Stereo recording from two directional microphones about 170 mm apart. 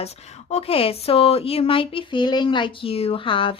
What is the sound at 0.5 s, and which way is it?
Speech, 35° left (ahead or behind).